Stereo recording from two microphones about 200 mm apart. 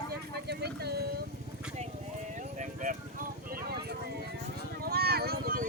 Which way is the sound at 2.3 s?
40° right (ahead or behind).